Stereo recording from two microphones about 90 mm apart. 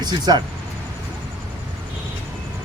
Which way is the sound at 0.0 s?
50° right (ahead or behind).